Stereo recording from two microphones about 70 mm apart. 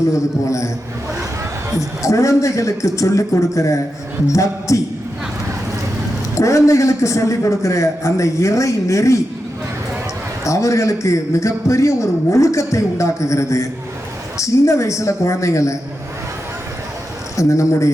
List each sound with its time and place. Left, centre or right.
0.1 s a man's voice: left
1.8 s a man's voice: left
6.3 s a man's voice: left
10.4 s a man's voice: left
17.3 s a man's voice: left